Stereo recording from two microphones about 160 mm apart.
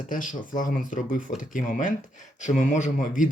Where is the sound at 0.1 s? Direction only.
55° left (ahead or behind).